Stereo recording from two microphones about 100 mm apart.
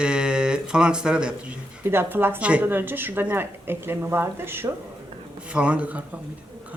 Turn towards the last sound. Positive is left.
turn(degrees=-15)  # may be behind; listen again after turning